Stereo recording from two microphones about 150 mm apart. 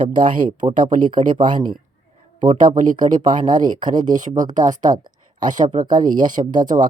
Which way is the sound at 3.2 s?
30° right (ahead or behind).